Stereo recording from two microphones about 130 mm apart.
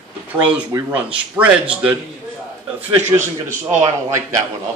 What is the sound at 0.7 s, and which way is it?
Speech, 25° right (ahead or behind).